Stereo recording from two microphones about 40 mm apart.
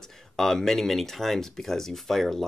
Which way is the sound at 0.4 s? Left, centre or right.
Centre.